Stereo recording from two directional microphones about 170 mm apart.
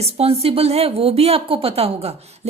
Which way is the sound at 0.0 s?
35° right (ahead or behind).